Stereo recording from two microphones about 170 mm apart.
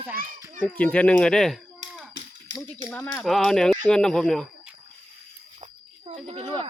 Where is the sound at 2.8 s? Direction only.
10° left (ahead or behind).